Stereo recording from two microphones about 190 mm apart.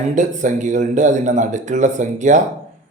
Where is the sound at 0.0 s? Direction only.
40° right (ahead or behind).